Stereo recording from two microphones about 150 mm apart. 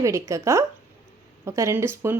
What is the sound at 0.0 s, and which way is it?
Speech, 20° right (ahead or behind).